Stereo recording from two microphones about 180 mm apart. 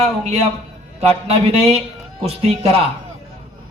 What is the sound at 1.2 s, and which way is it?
Speech, 35° right (ahead or behind).